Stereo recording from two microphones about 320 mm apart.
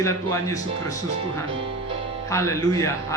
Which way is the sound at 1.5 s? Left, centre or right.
Centre.